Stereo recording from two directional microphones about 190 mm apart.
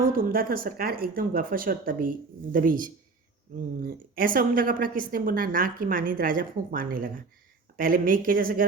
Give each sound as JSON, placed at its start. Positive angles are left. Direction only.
{"t": 0.0, "sound": "a woman's voice", "side_deg": -50}